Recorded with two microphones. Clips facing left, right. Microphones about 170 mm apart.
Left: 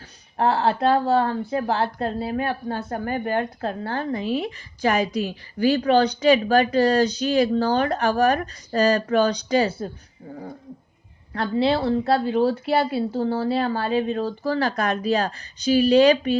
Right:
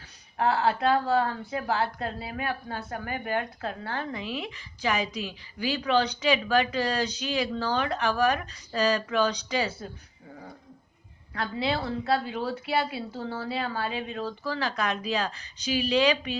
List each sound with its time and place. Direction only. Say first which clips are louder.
0.3 s speech: left 4 dB; 35° left (ahead or behind)